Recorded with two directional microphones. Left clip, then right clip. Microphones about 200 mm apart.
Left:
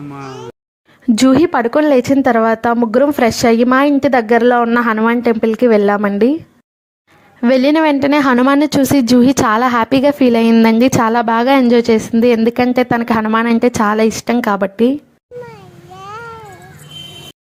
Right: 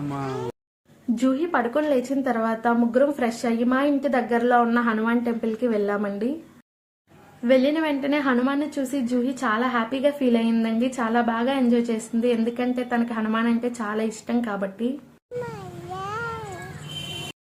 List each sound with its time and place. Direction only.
0.1 s speech: 10° left (ahead or behind)
1.1 s a woman's voice: 50° left (ahead or behind)
7.4 s a woman's voice: 50° left (ahead or behind)
15.5 s babbling: 15° right (ahead or behind)